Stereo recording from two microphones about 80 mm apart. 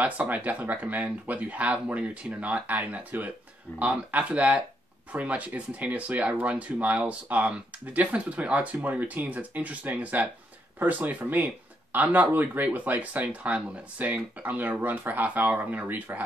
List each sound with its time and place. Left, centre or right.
0.0 s speech: centre